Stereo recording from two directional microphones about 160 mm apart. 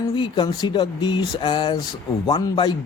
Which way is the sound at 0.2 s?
25° left (ahead or behind).